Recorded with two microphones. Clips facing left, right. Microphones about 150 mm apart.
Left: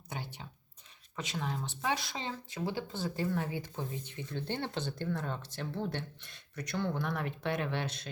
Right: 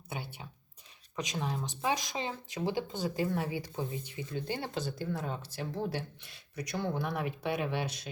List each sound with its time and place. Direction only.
1.1 s speech: 15° right (ahead or behind)